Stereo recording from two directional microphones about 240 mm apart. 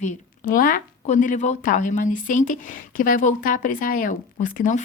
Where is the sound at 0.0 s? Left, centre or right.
Left.